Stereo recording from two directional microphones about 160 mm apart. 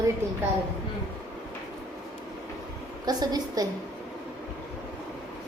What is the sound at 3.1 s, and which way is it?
Speech, 25° right (ahead or behind).